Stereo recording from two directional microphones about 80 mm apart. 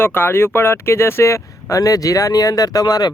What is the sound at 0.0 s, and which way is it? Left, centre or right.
Speech, left.